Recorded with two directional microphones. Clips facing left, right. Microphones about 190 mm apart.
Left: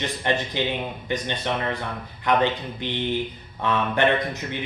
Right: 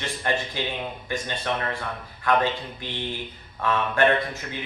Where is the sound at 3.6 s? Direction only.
20° left (ahead or behind).